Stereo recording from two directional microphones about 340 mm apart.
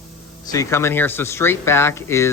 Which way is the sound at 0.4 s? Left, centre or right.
Centre.